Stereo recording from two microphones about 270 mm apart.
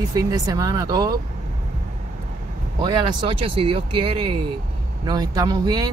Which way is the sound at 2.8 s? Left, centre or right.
Centre.